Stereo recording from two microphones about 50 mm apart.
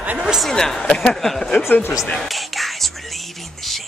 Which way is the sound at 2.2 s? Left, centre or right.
Centre.